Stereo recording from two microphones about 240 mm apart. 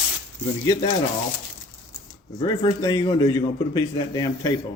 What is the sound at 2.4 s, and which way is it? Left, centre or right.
A man's voice, centre.